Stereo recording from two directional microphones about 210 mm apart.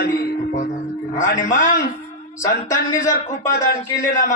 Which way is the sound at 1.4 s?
35° left (ahead or behind).